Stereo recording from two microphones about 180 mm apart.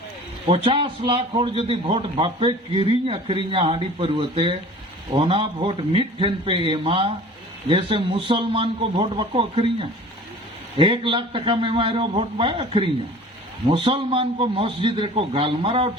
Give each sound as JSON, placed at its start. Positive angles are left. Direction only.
{"t": 0.4, "sound": "a man's voice", "side_deg": -30}
{"t": 10.8, "sound": "a man's voice", "side_deg": -30}